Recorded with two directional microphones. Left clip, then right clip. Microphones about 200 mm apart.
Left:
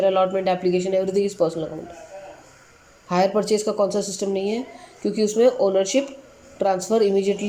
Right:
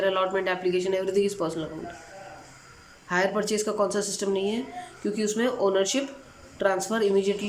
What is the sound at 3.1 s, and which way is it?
A woman's voice, 5° left (ahead or behind).